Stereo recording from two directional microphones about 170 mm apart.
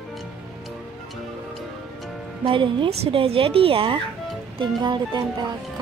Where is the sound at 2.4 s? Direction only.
30° right (ahead or behind).